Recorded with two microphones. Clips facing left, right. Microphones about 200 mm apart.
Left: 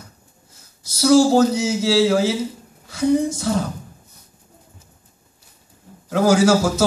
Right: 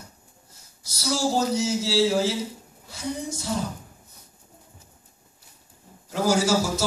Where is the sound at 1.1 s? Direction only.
90° left.